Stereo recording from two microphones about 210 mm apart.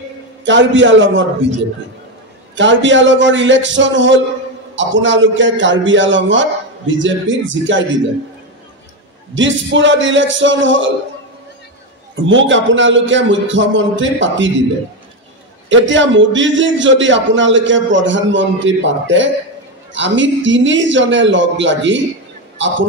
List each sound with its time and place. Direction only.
0.5 s a man's voice: 60° right (ahead or behind)
2.5 s a man's voice: 60° right (ahead or behind)
9.3 s a man's voice: 60° right (ahead or behind)
12.3 s a man's voice: 60° right (ahead or behind)
15.7 s a man's voice: 60° right (ahead or behind)